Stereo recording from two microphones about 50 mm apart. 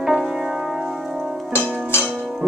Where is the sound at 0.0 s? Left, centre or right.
Centre.